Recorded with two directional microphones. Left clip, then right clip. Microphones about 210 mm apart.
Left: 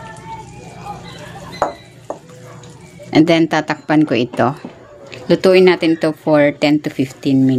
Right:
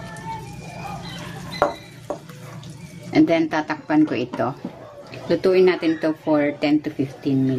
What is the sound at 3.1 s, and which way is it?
Speech, 45° left (ahead or behind).